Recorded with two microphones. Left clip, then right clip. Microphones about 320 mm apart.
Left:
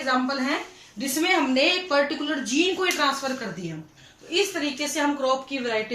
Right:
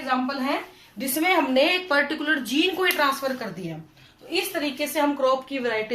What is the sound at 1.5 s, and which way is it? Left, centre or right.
Speech, right.